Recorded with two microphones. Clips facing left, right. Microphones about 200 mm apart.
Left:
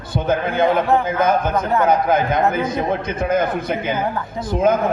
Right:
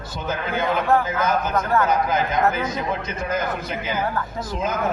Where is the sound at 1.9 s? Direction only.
55° left (ahead or behind).